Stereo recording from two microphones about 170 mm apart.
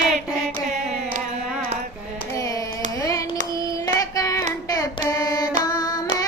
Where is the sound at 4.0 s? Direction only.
20° left (ahead or behind).